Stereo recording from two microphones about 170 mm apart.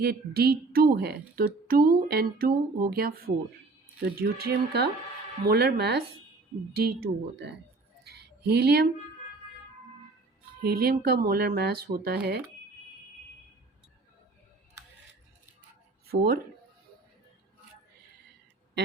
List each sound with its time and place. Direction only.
0.0 s a woman's voice: 70° right (ahead or behind)
8.0 s a sound: 70° right (ahead or behind)
10.6 s speech: 65° right (ahead or behind)